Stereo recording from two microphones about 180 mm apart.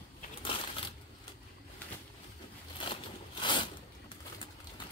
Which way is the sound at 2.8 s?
25° left (ahead or behind).